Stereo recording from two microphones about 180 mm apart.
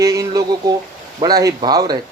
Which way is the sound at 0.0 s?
15° right (ahead or behind).